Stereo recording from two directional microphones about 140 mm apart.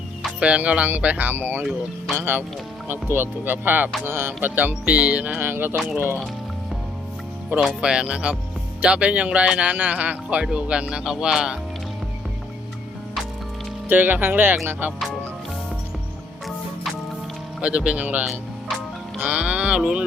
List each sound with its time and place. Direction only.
0.2 s speech: 5° right (ahead or behind)
7.8 s speech: 5° right (ahead or behind)
13.8 s speech: 15° right (ahead or behind)
17.6 s speech: 10° right (ahead or behind)